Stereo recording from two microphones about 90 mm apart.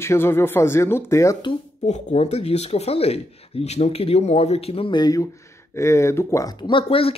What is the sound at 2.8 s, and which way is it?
Speech, 90° left.